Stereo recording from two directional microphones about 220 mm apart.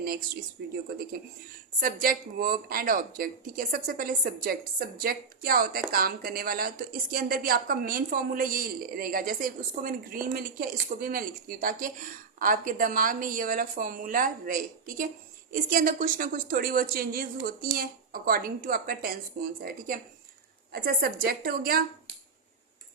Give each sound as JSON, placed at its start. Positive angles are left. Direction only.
{"t": 0.6, "sound": "a woman's voice", "side_deg": -45}
{"t": 1.8, "sound": "a woman's voice", "side_deg": -40}